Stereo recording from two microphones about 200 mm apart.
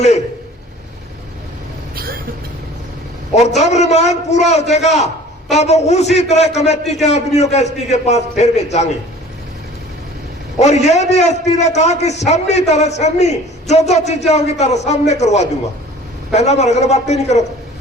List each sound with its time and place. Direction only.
2.0 s vehicle: 45° right (ahead or behind)
3.3 s a man's voice: 35° left (ahead or behind)
10.6 s a man's voice: 35° left (ahead or behind)